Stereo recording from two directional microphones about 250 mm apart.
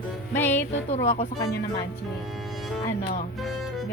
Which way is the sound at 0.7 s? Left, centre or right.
Left.